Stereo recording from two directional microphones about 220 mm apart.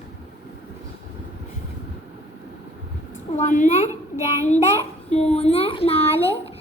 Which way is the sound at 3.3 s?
35° left (ahead or behind).